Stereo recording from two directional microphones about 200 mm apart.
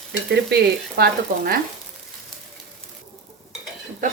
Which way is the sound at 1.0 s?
50° right (ahead or behind).